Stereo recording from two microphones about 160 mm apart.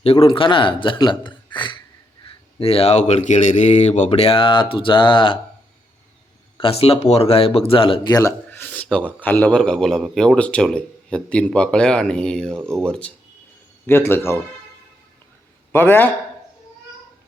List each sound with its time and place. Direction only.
0.0 s speech: 40° left (ahead or behind)
6.6 s speech: 35° left (ahead or behind)
8.4 s a sound: 10° left (ahead or behind)
9.2 s a man's voice: 10° left (ahead or behind)
15.7 s a man's voice: 15° left (ahead or behind)